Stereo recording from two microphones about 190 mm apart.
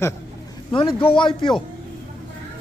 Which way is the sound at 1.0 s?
25° left (ahead or behind).